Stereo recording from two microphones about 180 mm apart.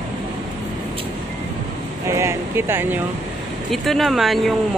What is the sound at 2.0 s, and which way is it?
Speech, 15° right (ahead or behind).